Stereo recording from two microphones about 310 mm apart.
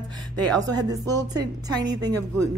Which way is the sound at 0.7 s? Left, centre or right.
Centre.